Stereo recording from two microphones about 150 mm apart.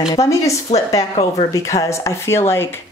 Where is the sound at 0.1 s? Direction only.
20° left (ahead or behind).